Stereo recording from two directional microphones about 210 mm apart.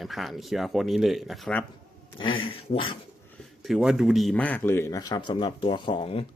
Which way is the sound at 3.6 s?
Centre (ahead or behind).